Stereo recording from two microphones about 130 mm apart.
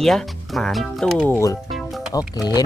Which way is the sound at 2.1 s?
30° left (ahead or behind).